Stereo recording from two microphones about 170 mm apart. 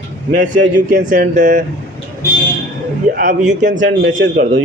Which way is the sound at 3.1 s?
50° right (ahead or behind).